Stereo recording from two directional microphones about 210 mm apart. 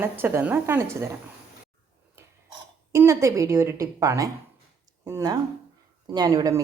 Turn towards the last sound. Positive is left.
turn(degrees=-15)  # may be behind; listen again after turning